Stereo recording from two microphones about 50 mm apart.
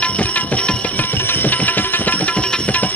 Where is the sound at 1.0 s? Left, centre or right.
Left.